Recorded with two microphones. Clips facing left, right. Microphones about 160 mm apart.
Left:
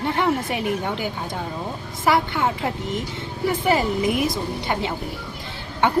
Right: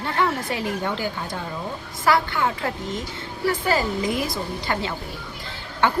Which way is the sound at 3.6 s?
20° left (ahead or behind).